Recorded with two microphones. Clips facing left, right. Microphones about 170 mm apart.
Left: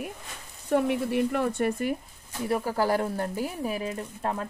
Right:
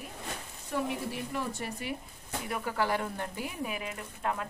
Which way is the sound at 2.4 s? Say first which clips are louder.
Left 6 dB; 35° left (ahead or behind).